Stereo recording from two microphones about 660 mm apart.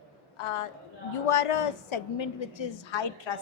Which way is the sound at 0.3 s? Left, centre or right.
Left.